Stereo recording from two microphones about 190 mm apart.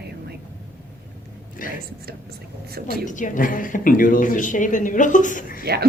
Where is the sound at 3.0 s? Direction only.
45° left (ahead or behind).